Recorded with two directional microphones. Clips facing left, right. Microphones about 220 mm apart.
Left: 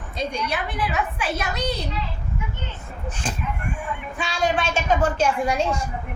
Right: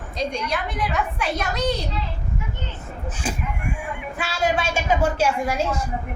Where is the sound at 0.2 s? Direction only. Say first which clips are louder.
Right 1 dB; 5° left (ahead or behind).